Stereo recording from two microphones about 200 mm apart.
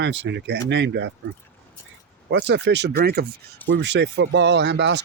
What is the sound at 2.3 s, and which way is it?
Speech, 60° right (ahead or behind).